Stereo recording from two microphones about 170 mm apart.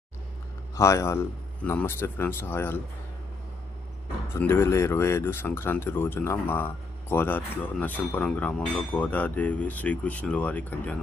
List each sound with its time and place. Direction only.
0.8 s speech: 15° left (ahead or behind)
4.4 s speech: 15° left (ahead or behind)